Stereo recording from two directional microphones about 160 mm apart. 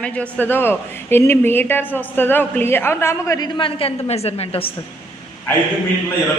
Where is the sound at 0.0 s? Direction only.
10° left (ahead or behind); by 4.7 s 40° left (ahead or behind).